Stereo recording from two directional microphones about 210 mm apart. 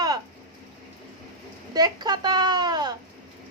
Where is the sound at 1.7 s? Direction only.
20° right (ahead or behind).